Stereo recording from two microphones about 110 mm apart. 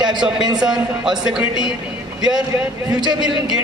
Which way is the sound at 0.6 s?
5° right (ahead or behind).